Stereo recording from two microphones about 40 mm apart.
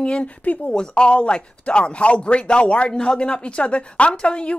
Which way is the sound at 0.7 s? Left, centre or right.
Left.